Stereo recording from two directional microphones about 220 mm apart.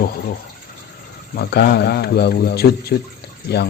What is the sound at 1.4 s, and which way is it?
Speech, 45° left (ahead or behind).